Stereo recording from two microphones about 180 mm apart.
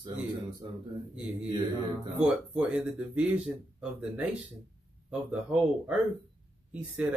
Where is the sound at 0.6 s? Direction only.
25° right (ahead or behind).